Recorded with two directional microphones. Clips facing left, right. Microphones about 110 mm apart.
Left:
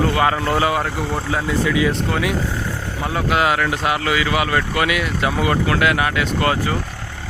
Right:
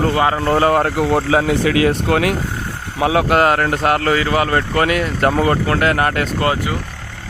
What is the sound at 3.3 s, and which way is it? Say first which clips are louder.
Speech: right 4 dB; 45° right (ahead or behind).